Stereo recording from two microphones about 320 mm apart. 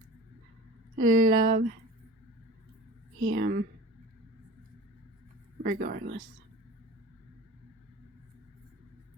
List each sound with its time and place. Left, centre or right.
0.9 s speech: right
3.2 s speech: right
5.6 s speech: right